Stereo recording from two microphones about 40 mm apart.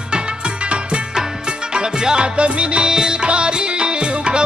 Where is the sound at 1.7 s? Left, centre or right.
Right.